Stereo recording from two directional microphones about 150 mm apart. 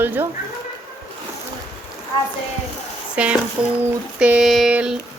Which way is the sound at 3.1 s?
10° right (ahead or behind).